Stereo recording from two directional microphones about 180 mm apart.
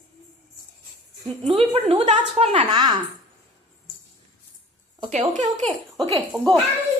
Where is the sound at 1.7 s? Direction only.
30° right (ahead or behind).